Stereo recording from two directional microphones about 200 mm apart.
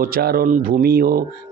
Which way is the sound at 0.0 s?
50° right (ahead or behind).